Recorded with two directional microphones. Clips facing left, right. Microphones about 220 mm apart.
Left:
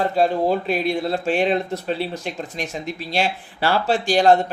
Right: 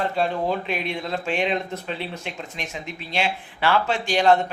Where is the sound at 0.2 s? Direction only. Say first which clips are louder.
Left 7 dB; 40° left (ahead or behind).